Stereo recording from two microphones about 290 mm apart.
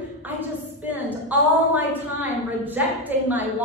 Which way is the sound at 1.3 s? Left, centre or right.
Centre.